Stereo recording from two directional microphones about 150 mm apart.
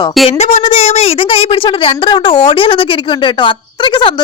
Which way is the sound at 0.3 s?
45° left (ahead or behind).